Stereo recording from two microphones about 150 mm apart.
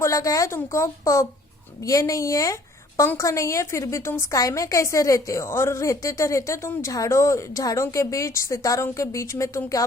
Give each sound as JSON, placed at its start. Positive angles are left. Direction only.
{"t": 0.0, "sound": "a woman's voice", "side_deg": 20}